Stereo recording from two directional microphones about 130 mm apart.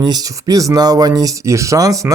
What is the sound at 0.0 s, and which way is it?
Speech, 30° right (ahead or behind).